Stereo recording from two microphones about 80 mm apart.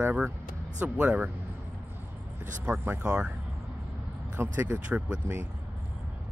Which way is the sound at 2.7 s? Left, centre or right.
Right.